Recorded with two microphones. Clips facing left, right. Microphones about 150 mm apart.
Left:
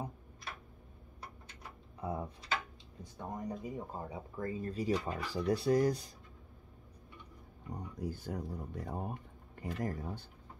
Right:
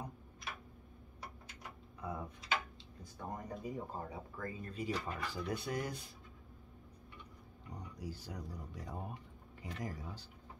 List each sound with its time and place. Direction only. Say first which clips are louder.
2.0 s speech: left 5 dB; 30° left (ahead or behind)
7.7 s speech: left 6 dB; 50° left (ahead or behind)